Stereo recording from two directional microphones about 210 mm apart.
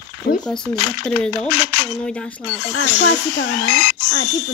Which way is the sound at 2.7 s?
55° left (ahead or behind).